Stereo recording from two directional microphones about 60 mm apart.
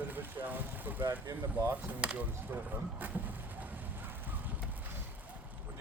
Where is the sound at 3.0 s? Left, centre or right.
Right.